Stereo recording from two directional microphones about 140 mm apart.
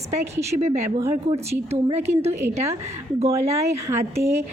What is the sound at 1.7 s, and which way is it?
Speech, 50° right (ahead or behind).